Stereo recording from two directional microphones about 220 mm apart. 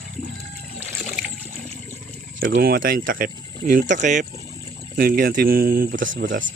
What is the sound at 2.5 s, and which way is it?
Speech, 45° right (ahead or behind).